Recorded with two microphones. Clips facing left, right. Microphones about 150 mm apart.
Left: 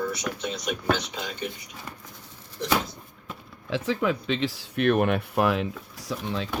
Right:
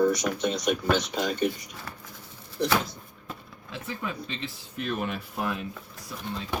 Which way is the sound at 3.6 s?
90° left.